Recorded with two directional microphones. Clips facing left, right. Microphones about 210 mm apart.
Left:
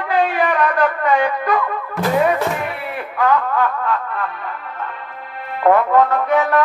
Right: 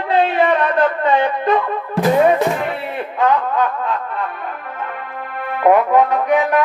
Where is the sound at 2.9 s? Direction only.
20° right (ahead or behind).